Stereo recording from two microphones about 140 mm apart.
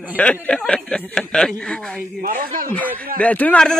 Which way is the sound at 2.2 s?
90° right.